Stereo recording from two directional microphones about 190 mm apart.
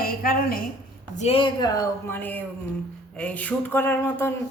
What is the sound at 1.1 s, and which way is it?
Speech, 35° left (ahead or behind).